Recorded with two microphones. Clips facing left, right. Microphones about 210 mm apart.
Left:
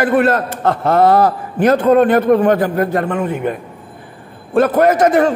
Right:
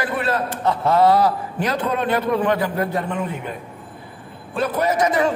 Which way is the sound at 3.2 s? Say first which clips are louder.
Left 8 dB; 50° left (ahead or behind).